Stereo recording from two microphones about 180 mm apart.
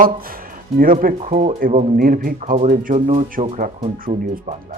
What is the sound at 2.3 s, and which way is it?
Speech, 40° right (ahead or behind).